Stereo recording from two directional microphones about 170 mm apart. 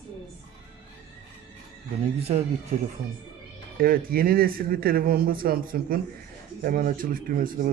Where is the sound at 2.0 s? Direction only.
40° right (ahead or behind).